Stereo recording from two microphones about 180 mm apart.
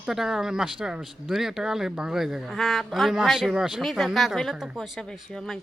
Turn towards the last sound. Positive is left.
turn(degrees=0)  # may be behind; listen again after turning